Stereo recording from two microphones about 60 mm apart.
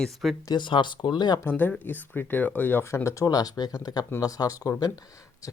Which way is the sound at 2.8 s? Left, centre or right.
Left.